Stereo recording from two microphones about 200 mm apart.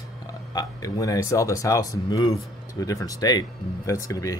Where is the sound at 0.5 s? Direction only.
20° left (ahead or behind).